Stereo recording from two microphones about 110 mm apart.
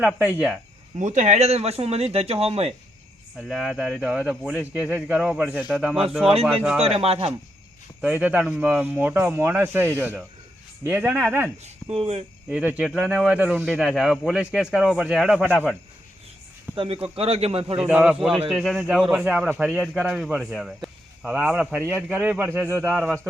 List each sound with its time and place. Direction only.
0.9 s speech: 90° right; by 2.7 s 65° right (ahead or behind)
3.5 s speech: 5° right (ahead or behind)
4.0 s speech: 10° right (ahead or behind)
6.8 s speech: 65° right (ahead or behind)
8.0 s speech: 15° right (ahead or behind)
11.9 s speech: 65° right (ahead or behind)
12.5 s speech: 15° right (ahead or behind)
16.7 s speech: 55° right (ahead or behind)
17.7 s speech: 10° right (ahead or behind)